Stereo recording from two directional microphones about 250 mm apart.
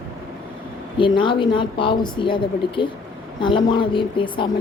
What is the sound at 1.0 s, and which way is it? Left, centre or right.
A woman's voice, centre.